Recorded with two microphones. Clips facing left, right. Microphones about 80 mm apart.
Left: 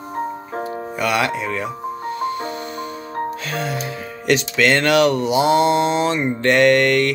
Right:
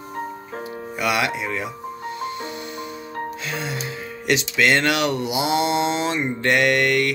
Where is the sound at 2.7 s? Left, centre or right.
Centre.